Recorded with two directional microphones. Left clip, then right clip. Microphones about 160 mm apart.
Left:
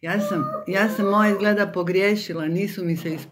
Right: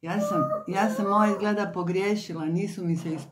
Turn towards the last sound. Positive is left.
turn(degrees=5)  # may be behind; listen again after turning